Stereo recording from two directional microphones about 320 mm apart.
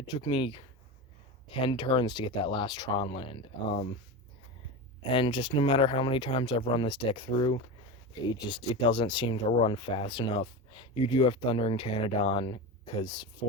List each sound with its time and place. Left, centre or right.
0.1 s speech: centre
5.1 s speech: centre